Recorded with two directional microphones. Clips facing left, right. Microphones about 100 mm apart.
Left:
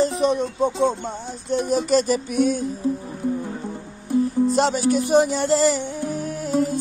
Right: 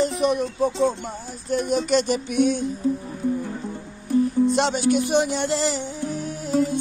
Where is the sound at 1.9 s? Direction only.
40° left (ahead or behind).